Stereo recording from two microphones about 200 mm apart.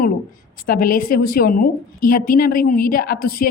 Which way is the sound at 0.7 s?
45° left (ahead or behind).